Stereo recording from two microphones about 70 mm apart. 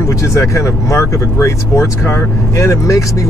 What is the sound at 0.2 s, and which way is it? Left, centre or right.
Speech, left.